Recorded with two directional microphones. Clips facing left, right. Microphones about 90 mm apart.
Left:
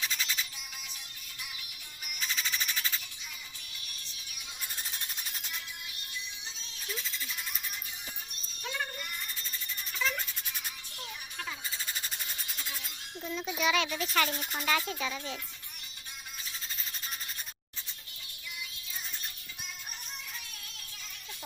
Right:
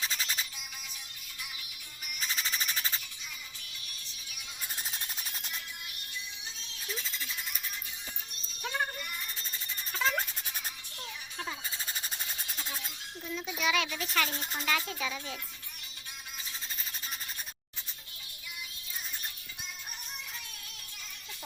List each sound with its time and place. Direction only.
0.0 s music: 40° right (ahead or behind)
2.2 s squawk: 35° right (ahead or behind)
9.9 s music: 40° right (ahead or behind)
12.5 s music: 30° right (ahead or behind)
13.2 s speech: 5° left (ahead or behind)